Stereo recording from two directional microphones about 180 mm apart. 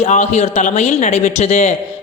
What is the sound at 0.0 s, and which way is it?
A man's voice, 40° left (ahead or behind).